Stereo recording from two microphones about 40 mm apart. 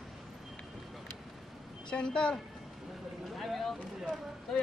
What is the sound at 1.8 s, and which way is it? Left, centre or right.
Speech, left.